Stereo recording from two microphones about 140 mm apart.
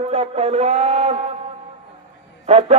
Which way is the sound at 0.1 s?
50° right (ahead or behind).